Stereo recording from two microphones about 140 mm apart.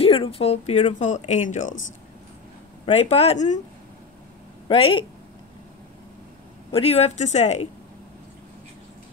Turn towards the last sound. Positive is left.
turn(degrees=55)  # may be behind; listen again after turning